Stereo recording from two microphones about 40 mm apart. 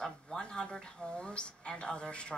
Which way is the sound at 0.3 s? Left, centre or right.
Left.